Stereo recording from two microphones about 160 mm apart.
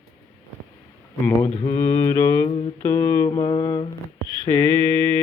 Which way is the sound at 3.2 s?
30° left (ahead or behind).